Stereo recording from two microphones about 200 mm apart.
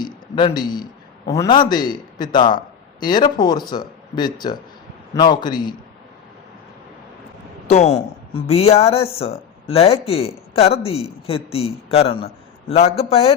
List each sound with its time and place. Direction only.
0.0 s a sound: 20° left (ahead or behind)
1.3 s a man's voice: 20° left (ahead or behind)
8.4 s a woman's voice: 30° left (ahead or behind)